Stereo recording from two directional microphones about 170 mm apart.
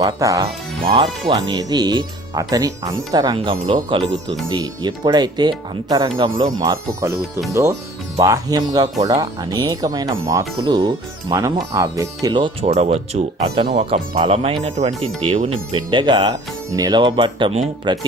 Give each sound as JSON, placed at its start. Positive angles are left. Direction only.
{"t": 0.0, "sound": "speech", "side_deg": -20}
{"t": 12.6, "sound": "speech", "side_deg": -40}